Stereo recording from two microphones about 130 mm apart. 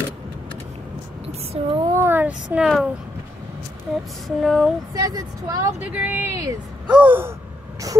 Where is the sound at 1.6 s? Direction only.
50° right (ahead or behind).